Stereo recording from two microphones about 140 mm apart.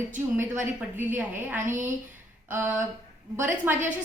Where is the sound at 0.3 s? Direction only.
15° right (ahead or behind).